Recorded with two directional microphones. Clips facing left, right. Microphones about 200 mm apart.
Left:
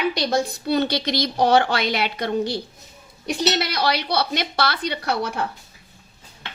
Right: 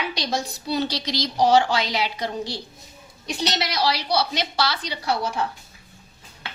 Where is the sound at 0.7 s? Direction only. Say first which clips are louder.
Left 2 dB; 60° left (ahead or behind).